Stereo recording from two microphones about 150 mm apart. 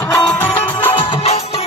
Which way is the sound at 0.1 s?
15° left (ahead or behind).